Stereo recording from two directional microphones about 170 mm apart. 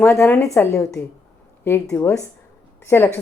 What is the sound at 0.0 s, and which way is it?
A woman's voice, 15° left (ahead or behind).